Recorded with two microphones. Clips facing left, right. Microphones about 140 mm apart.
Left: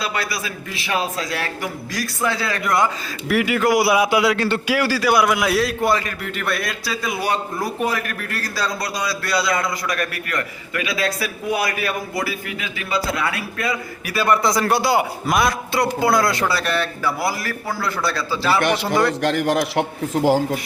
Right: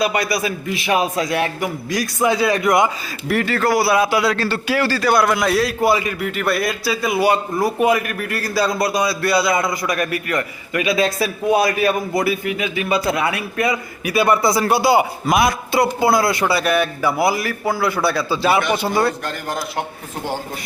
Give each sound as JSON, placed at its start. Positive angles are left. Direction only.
{"t": 0.0, "sound": "a man's voice", "side_deg": -15}
{"t": 3.2, "sound": "a man's voice", "side_deg": 5}
{"t": 3.5, "sound": "a man's voice", "side_deg": 15}
{"t": 18.6, "sound": "a man's voice", "side_deg": 90}